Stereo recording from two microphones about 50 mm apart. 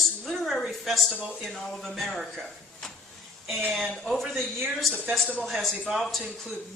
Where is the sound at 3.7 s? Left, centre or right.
Centre.